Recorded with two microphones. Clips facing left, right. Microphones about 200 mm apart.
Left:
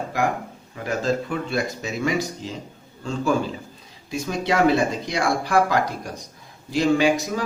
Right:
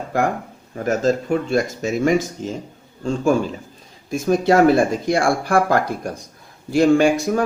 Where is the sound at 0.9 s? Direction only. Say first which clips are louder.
Right 5 dB; 45° right (ahead or behind).